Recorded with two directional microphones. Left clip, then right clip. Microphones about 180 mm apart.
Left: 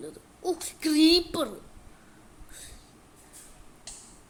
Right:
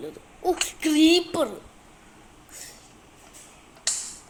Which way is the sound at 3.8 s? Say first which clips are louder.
Right 18 dB; 25° right (ahead or behind).